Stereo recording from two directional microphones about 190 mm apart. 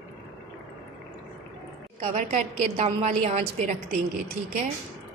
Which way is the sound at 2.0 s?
35° right (ahead or behind).